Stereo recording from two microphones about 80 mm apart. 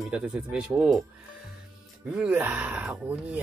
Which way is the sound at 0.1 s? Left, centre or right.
Centre.